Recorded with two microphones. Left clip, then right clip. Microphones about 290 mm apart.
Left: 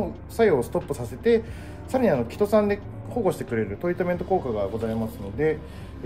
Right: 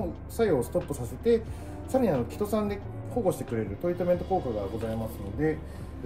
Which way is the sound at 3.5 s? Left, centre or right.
Left.